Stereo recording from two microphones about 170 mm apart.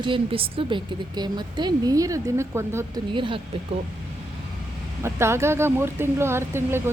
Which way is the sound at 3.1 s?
30° right (ahead or behind).